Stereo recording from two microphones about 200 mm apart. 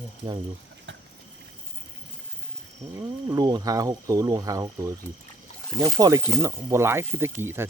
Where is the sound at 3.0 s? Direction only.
20° right (ahead or behind).